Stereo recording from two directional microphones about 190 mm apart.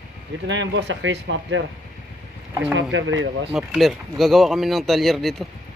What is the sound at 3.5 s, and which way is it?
Speech, centre (ahead or behind).